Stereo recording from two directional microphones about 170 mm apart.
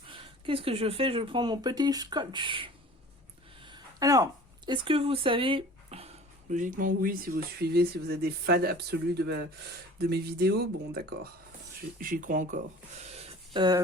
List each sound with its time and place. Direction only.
0.1 s speech: 30° right (ahead or behind)
3.6 s a sound: 25° right (ahead or behind)
6.5 s speech: 50° right (ahead or behind); by 11.3 s 70° right (ahead or behind)
11.9 s speech: 55° right (ahead or behind); by 13.7 s 25° right (ahead or behind)